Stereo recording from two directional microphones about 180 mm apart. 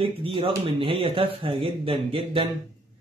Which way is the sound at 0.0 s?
30° right (ahead or behind).